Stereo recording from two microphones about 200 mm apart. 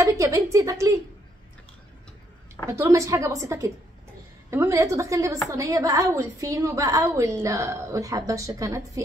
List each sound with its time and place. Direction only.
0.0 s a woman's voice: 15° right (ahead or behind)
2.6 s a woman's voice: 15° right (ahead or behind)